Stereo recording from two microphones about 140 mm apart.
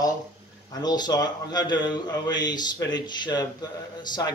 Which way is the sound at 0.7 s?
30° left (ahead or behind).